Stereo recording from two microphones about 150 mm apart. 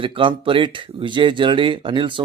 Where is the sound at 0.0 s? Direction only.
35° right (ahead or behind).